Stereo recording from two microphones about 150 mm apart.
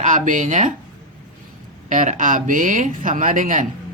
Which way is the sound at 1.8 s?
60° right (ahead or behind).